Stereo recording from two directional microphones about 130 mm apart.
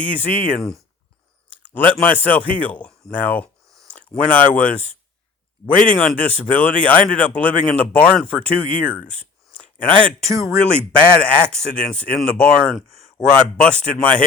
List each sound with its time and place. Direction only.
0.0 s speech: 10° left (ahead or behind)
1.7 s speech: 10° left (ahead or behind)
10.3 s speech: 25° right (ahead or behind)
10.7 s speech: 10° left (ahead or behind)